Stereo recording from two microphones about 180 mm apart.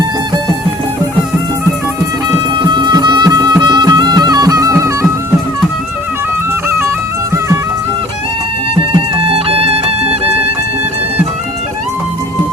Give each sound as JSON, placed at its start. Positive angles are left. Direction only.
{"t": 2.6, "sound": "music", "side_deg": -25}
{"t": 6.7, "sound": "music", "side_deg": -15}
{"t": 8.7, "sound": "music", "side_deg": -30}